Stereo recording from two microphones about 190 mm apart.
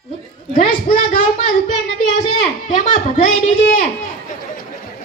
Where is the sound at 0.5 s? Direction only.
45° left (ahead or behind).